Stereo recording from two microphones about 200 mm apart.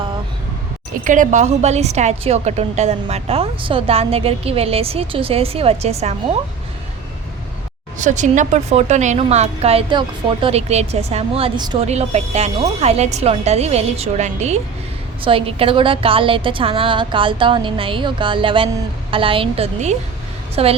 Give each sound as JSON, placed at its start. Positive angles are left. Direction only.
{"t": 1.0, "sound": "a woman's voice", "side_deg": -40}
{"t": 7.9, "sound": "speech", "side_deg": -40}
{"t": 11.9, "sound": "a woman's voice", "side_deg": -35}